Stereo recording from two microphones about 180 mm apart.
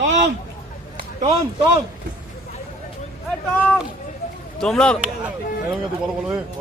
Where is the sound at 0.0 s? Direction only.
80° right.